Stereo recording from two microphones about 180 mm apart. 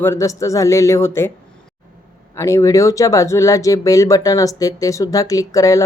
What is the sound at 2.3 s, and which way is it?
Speech, 15° left (ahead or behind).